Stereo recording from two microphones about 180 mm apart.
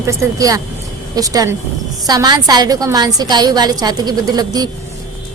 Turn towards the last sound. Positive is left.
turn(degrees=-20)  # may be behind; listen again after turning